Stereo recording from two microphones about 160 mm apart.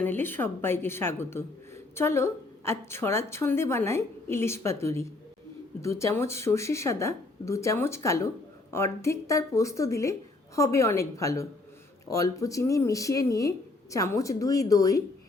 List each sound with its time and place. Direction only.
0.0 s a woman's voice: 10° left (ahead or behind)